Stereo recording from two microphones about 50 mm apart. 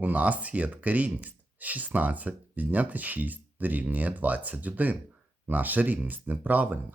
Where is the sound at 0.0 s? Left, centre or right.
Right.